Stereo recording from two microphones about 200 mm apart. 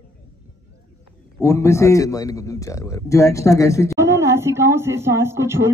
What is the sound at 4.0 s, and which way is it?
Speech, 15° right (ahead or behind).